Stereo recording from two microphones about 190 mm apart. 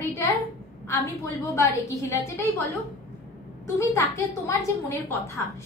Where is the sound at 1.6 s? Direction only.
15° left (ahead or behind).